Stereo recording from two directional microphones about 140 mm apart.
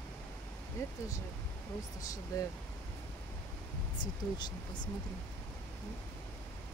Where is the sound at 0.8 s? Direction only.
20° left (ahead or behind).